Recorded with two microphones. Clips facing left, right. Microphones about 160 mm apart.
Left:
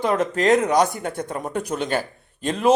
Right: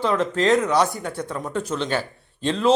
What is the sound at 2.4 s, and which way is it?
Speech, 45° left (ahead or behind).